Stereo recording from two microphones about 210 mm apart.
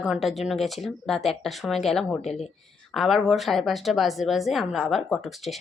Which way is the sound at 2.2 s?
30° left (ahead or behind).